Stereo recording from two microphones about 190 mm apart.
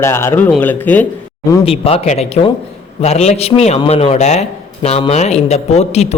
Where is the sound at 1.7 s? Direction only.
30° left (ahead or behind).